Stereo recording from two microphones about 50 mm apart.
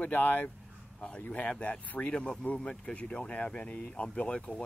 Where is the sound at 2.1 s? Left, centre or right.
Centre.